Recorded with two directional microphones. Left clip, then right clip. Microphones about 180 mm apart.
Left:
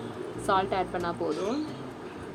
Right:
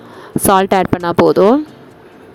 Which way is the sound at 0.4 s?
70° right (ahead or behind).